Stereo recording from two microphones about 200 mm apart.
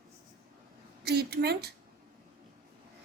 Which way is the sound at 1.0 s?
55° right (ahead or behind).